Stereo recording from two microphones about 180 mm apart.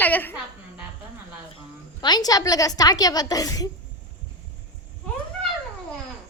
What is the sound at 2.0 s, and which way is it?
A woman's voice, 25° left (ahead or behind).